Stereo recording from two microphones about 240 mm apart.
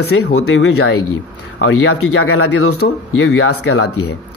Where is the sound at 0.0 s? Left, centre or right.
Left.